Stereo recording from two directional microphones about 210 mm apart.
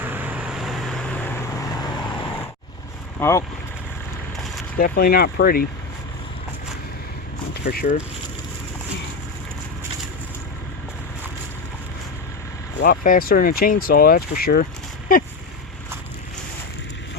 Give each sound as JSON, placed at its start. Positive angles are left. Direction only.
{"t": 0.0, "sound": "vehicle", "side_deg": -10}
{"t": 3.2, "sound": "speech", "side_deg": 10}
{"t": 4.8, "sound": "speech", "side_deg": 45}
{"t": 7.5, "sound": "speech", "side_deg": 50}
{"t": 12.8, "sound": "speech", "side_deg": 45}